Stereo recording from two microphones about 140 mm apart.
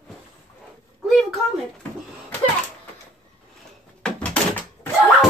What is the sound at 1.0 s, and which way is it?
Speech, centre (ahead or behind).